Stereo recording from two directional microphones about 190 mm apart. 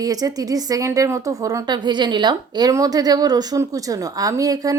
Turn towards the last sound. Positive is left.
turn(degrees=-20)  # may be behind; listen again after turning